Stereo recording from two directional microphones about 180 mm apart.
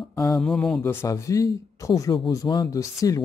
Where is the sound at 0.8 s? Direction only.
15° left (ahead or behind).